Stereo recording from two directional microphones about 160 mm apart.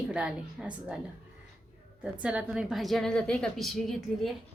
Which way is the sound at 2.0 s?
10° right (ahead or behind).